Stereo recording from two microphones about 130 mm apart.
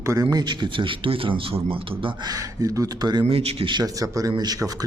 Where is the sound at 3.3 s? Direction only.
50° right (ahead or behind).